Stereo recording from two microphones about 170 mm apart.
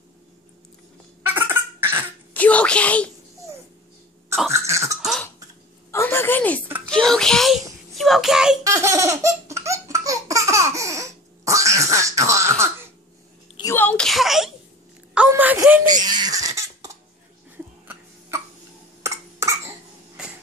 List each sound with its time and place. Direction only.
1.2 s cough: 10° right (ahead or behind)
2.3 s speech: 10° left (ahead or behind)
4.5 s cough: 15° right (ahead or behind)
5.9 s a sound: 15° left (ahead or behind)
6.9 s a child's voice: 5° left (ahead or behind)
8.6 s laughter: 20° right (ahead or behind)
13.7 s a sound: 5° left (ahead or behind)
15.1 s baby laughter: 10° right (ahead or behind)
19.0 s cough: 20° right (ahead or behind)